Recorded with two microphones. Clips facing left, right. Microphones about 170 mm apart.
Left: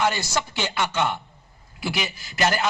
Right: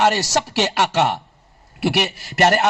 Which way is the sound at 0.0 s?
75° right (ahead or behind).